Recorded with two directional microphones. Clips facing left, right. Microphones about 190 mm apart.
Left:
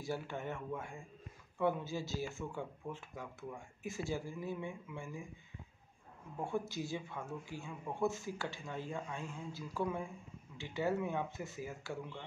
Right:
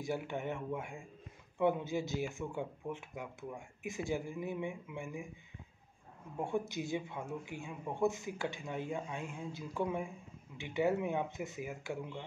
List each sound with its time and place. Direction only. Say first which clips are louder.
0.0 s speech: right 3 dB; 20° right (ahead or behind)
6.3 s speech: right 2 dB; 20° right (ahead or behind)